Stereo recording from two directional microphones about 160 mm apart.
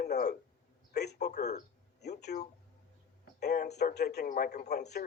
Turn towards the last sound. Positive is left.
turn(degrees=90)